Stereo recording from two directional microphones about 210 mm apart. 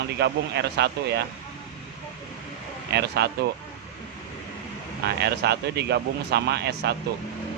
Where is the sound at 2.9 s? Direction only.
50° right (ahead or behind).